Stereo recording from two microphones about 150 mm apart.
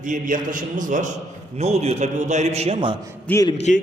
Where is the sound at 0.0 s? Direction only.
60° right (ahead or behind).